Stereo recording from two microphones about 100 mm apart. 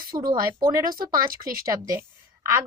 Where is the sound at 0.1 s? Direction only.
40° right (ahead or behind).